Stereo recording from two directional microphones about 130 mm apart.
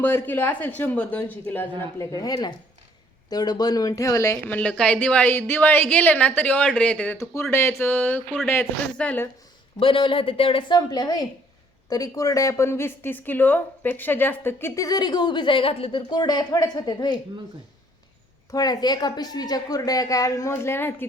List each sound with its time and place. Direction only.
0.0 s a woman's voice: 15° left (ahead or behind)
2.0 s speech: 30° left (ahead or behind)
4.4 s a woman's voice: 10° left (ahead or behind)
9.8 s speech: 40° left (ahead or behind)
18.5 s speech: 30° left (ahead or behind)